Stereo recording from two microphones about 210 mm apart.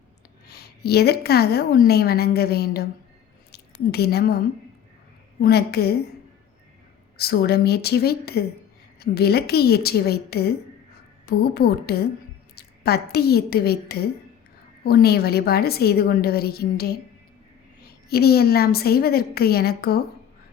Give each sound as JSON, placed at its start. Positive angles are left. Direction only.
{"t": 0.4, "sound": "a woman's voice", "side_deg": 50}
{"t": 5.4, "sound": "a woman's voice", "side_deg": 50}
{"t": 7.2, "sound": "a woman's voice", "side_deg": 50}
{"t": 18.1, "sound": "a woman's voice", "side_deg": 50}